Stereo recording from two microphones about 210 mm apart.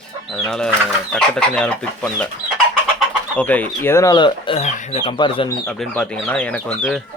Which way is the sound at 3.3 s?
5° left (ahead or behind).